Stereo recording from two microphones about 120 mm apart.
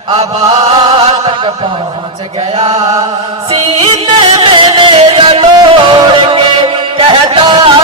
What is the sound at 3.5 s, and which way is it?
Music, 50° right (ahead or behind).